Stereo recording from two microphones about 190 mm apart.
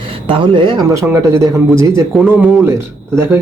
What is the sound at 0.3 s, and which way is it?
A man's voice, 25° right (ahead or behind).